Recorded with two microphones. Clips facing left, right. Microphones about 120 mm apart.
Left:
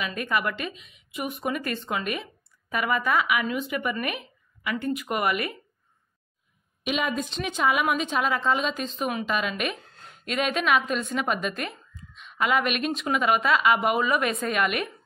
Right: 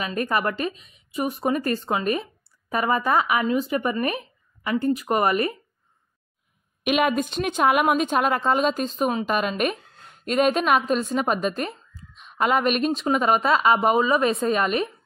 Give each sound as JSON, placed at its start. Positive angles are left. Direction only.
{"t": 0.0, "sound": "speech", "side_deg": -40}
{"t": 6.8, "sound": "a woman's voice", "side_deg": -60}